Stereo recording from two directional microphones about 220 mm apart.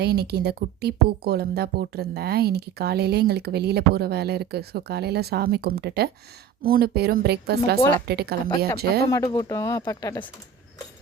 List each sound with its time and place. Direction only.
0.0 s a woman's voice: 45° right (ahead or behind)
9.0 s speech: 15° left (ahead or behind)